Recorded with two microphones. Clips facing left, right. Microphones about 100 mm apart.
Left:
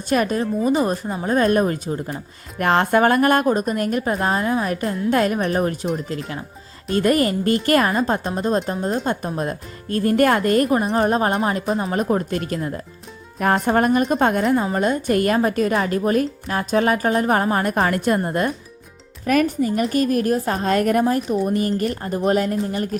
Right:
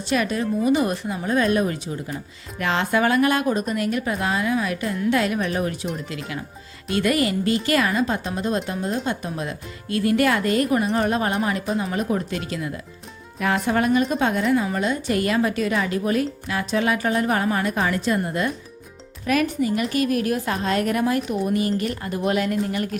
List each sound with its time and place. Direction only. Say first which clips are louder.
0.1 s a woman's voice: left 3 dB; 45° left (ahead or behind)